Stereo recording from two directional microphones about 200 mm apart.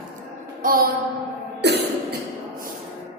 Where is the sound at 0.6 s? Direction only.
45° right (ahead or behind).